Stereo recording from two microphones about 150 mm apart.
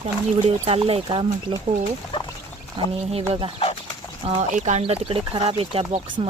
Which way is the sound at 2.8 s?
40° right (ahead or behind).